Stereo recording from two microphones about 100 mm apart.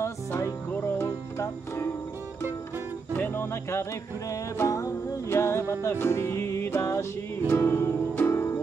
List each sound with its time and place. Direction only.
0.0 s music: 30° left (ahead or behind)
3.1 s music: 20° left (ahead or behind)
4.3 s music: 30° left (ahead or behind)